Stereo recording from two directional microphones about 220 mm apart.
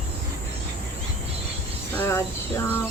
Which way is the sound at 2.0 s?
15° left (ahead or behind).